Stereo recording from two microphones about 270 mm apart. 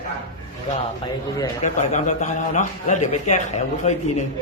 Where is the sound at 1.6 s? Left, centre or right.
Left.